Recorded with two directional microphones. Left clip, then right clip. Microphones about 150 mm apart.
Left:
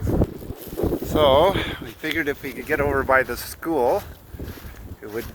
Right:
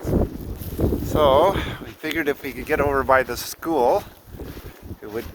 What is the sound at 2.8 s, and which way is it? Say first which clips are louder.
Speech: right 1 dB; 20° right (ahead or behind).